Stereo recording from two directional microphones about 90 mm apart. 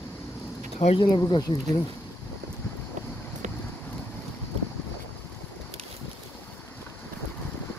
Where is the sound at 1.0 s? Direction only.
50° left (ahead or behind).